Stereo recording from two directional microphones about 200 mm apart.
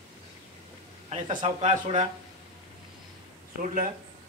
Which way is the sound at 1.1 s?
35° right (ahead or behind).